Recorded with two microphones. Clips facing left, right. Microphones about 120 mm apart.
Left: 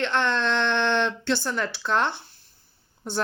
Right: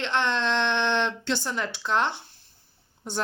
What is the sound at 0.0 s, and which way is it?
Speech, 20° right (ahead or behind).